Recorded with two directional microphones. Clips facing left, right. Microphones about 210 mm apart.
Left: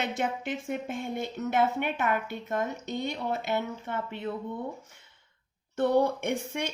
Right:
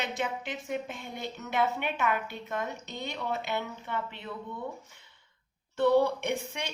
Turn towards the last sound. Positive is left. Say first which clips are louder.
# left 2 dB
turn(degrees=50)  # may be behind; listen again after turning